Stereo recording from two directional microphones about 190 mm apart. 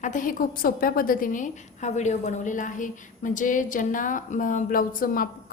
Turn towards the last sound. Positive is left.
turn(degrees=45)  # may be behind; listen again after turning